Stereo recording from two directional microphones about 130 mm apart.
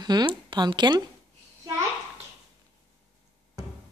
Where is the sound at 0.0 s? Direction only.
35° right (ahead or behind).